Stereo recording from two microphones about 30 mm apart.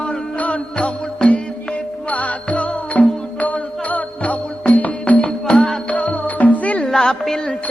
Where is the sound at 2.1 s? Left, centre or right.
Left.